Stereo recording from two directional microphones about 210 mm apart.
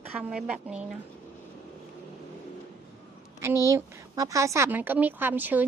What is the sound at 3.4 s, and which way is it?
A woman's voice, 15° right (ahead or behind).